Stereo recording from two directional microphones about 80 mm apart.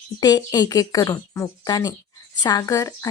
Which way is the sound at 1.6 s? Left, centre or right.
Left.